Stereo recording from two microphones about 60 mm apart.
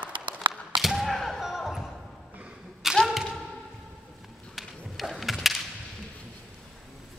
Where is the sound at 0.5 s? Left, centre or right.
Centre.